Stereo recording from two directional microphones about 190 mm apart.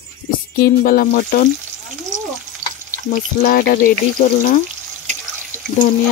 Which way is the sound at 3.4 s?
50° left (ahead or behind).